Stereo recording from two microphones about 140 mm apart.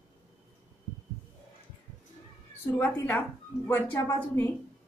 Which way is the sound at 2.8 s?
15° left (ahead or behind).